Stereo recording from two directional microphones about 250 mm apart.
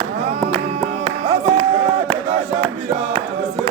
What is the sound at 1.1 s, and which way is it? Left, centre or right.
Music, right.